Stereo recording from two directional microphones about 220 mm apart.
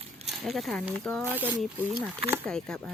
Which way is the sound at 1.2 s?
10° right (ahead or behind).